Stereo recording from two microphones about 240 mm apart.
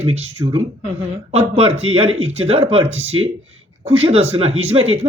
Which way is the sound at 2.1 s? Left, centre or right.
Right.